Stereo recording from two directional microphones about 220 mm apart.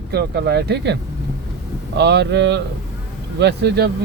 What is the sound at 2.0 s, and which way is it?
Speech, 50° right (ahead or behind).